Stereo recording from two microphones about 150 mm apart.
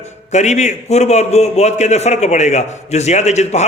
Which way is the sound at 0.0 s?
50° left (ahead or behind).